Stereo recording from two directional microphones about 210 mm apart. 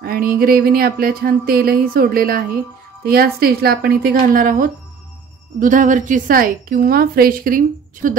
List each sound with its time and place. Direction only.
0.0 s a woman's voice: 45° right (ahead or behind)